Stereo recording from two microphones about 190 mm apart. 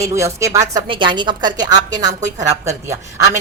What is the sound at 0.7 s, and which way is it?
A woman's voice, 25° right (ahead or behind).